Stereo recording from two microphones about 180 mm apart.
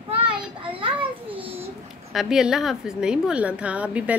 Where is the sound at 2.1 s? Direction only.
Centre (ahead or behind).